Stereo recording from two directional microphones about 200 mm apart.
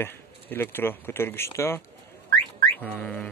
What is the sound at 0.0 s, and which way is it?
Speech, 10° left (ahead or behind).